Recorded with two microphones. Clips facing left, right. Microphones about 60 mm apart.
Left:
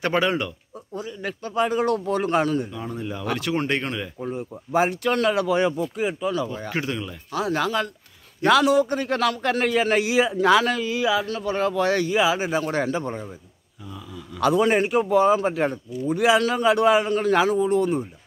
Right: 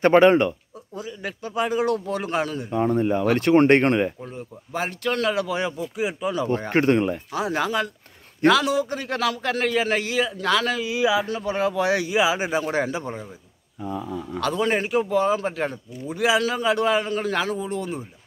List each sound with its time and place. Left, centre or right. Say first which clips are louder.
0.0 s speech: right 8 dB; right
0.9 s speech: left 1 dB; centre
2.7 s speech: right 10 dB; right
4.2 s speech: left 6 dB; centre
6.6 s speech: right 8 dB; right
7.3 s a man's voice: left 2 dB; centre
8.5 s speech: left 2 dB; centre
10.1 s a man's voice: left 6 dB; centre
10.7 s a man's voice: right 1 dB; centre
13.8 s speech: right 9 dB; right
14.4 s speech: left 4 dB; centre